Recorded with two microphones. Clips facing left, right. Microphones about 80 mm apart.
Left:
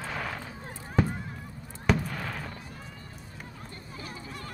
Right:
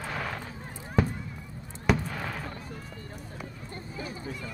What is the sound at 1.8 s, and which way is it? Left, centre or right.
Fireworks, centre.